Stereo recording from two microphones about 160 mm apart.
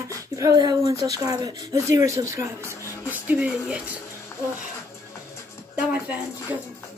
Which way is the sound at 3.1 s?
10° right (ahead or behind).